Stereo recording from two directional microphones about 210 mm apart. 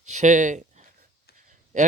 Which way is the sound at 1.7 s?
35° right (ahead or behind).